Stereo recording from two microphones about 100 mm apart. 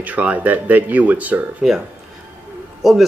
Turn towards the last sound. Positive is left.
turn(degrees=0)  # may be behind; listen again after turning